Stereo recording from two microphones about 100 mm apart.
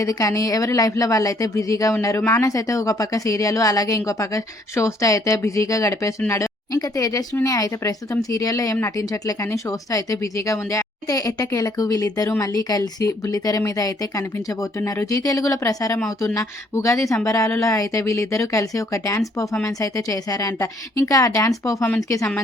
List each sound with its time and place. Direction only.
0.0 s speech: 35° left (ahead or behind)